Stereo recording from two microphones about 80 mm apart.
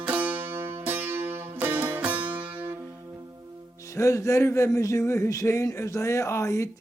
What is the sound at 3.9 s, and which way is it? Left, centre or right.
Speech, left.